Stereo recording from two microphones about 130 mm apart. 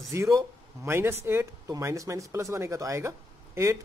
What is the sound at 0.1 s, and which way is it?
Speech, 20° right (ahead or behind).